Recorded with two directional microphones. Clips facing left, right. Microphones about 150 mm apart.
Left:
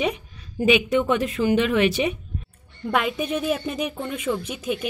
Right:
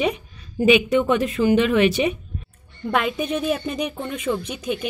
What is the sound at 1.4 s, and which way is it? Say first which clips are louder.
Speech: right 3 dB; 85° right.